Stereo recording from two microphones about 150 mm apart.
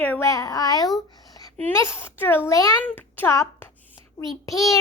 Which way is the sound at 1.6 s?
20° left (ahead or behind).